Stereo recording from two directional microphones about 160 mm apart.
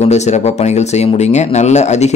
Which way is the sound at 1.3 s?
45° left (ahead or behind).